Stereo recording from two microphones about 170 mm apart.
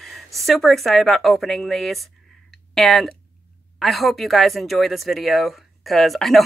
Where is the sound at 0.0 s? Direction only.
Centre (ahead or behind).